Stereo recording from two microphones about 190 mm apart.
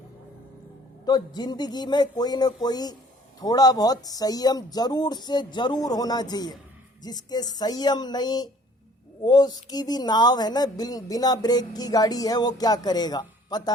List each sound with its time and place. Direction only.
1.0 s a woman's voice: 20° left (ahead or behind)